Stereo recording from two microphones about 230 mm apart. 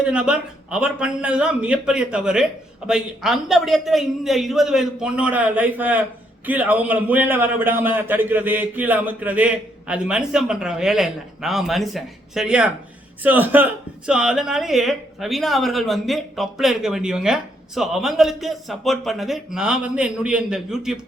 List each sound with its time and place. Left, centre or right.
0.0 s a man's voice: centre